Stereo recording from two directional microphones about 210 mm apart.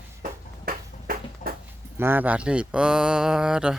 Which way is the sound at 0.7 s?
45° right (ahead or behind).